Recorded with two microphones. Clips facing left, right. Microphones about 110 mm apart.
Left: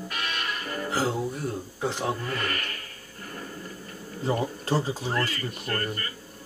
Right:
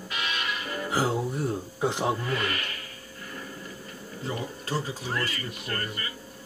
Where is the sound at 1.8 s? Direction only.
15° right (ahead or behind).